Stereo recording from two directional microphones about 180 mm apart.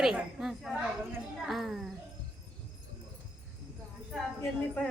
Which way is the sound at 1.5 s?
Centre (ahead or behind).